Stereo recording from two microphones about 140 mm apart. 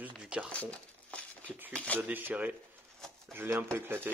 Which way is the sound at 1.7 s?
10° left (ahead or behind).